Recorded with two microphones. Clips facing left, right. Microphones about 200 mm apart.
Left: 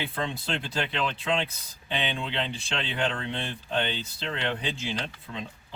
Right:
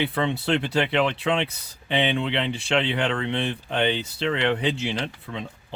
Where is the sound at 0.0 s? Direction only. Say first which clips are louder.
Right 7 dB; 65° right (ahead or behind).